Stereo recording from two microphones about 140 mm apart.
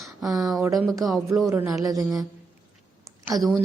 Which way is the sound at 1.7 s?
25° right (ahead or behind).